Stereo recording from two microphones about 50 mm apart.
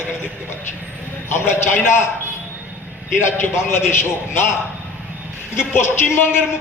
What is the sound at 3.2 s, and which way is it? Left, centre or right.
A man's voice, left.